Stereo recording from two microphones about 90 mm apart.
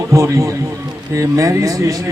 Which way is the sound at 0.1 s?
35° right (ahead or behind).